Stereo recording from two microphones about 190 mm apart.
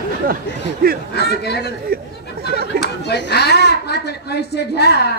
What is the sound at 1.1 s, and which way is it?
Speech, 60° left (ahead or behind).